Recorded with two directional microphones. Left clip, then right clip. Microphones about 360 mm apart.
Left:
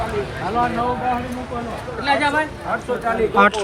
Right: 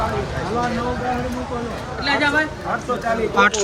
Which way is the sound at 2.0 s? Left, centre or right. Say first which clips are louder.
Even; centre.